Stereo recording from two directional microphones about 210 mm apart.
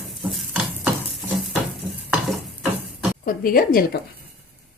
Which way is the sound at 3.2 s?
45° left (ahead or behind).